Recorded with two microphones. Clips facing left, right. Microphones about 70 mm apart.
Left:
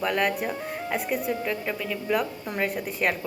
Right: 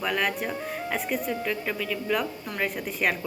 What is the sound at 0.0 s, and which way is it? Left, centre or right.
A woman's voice, centre.